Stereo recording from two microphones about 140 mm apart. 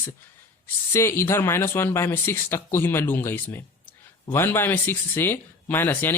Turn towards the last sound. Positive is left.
turn(degrees=15)  # may be behind; listen again after turning